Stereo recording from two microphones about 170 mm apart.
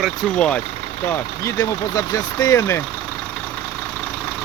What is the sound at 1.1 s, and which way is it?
Speech, 20° left (ahead or behind).